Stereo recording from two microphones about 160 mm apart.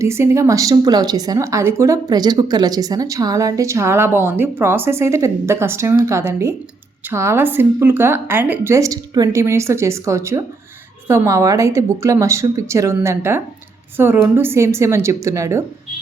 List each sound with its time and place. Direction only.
0.0 s a woman's voice: 15° right (ahead or behind)